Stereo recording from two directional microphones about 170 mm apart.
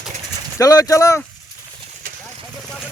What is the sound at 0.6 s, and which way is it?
Speech, 20° left (ahead or behind).